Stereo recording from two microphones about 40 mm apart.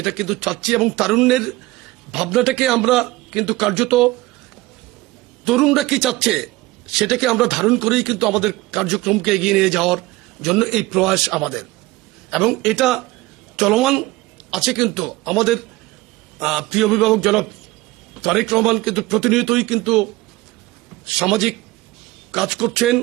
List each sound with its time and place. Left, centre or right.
0.0 s a man's voice: centre
5.5 s a man's voice: centre